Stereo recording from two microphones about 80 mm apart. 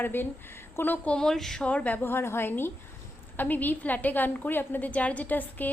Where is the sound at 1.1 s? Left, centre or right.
Centre.